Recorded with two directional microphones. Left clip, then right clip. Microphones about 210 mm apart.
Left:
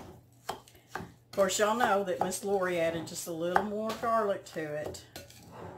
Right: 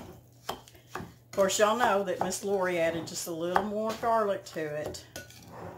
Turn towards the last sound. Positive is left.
turn(degrees=-5)  # may be behind; listen again after turning